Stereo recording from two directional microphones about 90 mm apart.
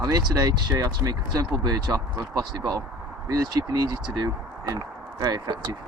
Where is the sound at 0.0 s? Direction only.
45° right (ahead or behind).